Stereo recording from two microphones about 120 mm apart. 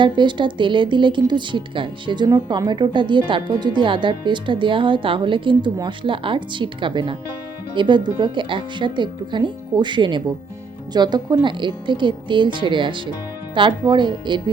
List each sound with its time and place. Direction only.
0.0 s speech: 40° right (ahead or behind)